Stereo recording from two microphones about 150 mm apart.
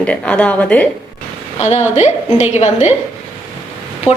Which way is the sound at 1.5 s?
50° left (ahead or behind).